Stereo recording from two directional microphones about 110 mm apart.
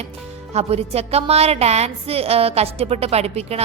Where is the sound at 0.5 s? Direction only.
70° right (ahead or behind).